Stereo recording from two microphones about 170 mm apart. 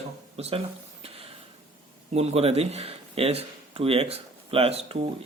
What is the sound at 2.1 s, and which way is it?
Speech, 40° right (ahead or behind).